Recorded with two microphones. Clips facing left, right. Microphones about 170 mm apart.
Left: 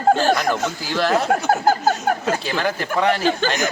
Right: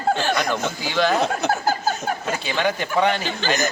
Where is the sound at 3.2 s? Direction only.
45° left (ahead or behind).